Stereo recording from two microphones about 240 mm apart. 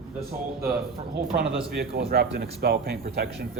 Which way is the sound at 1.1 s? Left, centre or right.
Right.